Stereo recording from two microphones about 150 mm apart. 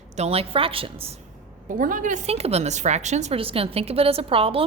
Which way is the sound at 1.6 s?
65° right (ahead or behind).